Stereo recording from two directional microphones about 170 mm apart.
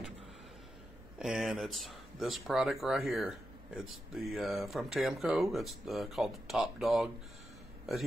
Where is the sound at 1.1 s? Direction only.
Centre (ahead or behind).